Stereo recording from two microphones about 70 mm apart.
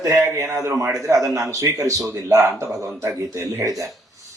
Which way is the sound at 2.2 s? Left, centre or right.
Right.